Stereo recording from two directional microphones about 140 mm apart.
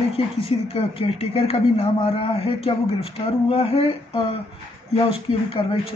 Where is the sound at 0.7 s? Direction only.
45° left (ahead or behind).